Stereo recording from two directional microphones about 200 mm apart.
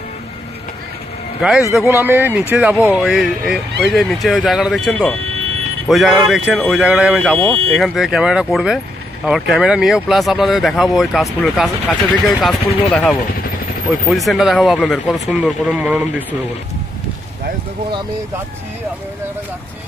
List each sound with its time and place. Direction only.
1.7 s speech: centre (ahead or behind)